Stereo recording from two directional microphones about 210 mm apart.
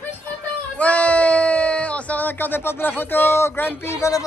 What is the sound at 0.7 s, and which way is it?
Speech, 5° left (ahead or behind).